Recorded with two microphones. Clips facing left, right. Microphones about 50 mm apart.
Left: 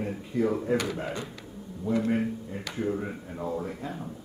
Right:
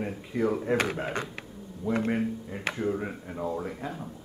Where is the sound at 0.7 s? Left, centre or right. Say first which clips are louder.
Right 1 dB; right.